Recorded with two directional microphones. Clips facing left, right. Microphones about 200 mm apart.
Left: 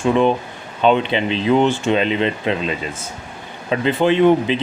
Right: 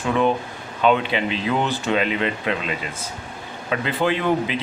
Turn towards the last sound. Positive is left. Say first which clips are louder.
# left 7 dB
turn(degrees=25)  # may be behind; listen again after turning